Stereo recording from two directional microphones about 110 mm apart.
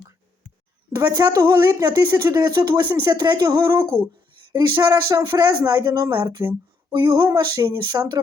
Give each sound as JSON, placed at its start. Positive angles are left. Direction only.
{"t": 0.9, "sound": "speech", "side_deg": -35}